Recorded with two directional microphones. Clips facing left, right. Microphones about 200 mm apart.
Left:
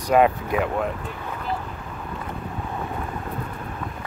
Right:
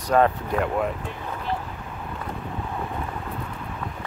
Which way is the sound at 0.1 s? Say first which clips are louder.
Left 2 dB; 10° left (ahead or behind).